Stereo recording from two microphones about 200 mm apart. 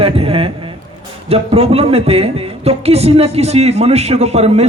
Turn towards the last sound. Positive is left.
turn(degrees=-30)  # may be behind; listen again after turning